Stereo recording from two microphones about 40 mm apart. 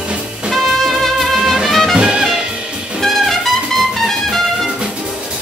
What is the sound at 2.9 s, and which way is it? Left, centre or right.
Brass instrument, centre.